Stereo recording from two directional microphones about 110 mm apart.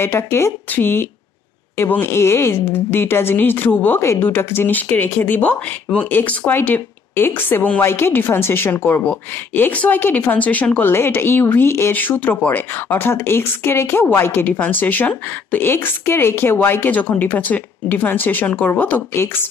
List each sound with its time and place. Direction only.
0.0 s speech: 20° left (ahead or behind)